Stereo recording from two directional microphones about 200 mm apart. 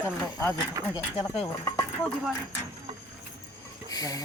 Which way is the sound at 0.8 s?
20° right (ahead or behind).